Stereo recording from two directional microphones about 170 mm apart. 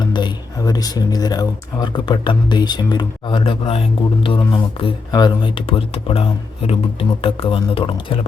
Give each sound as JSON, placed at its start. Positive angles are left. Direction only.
{"t": 0.1, "sound": "speech", "side_deg": 25}